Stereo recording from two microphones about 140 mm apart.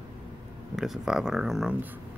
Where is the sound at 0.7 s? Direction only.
5° right (ahead or behind).